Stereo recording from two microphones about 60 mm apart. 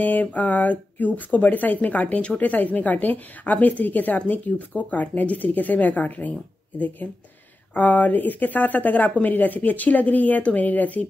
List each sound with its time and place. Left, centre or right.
0.0 s speech: left
7.0 s speech: centre
7.7 s speech: left